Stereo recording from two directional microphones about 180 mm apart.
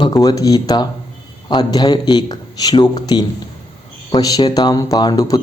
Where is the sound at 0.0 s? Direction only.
20° left (ahead or behind).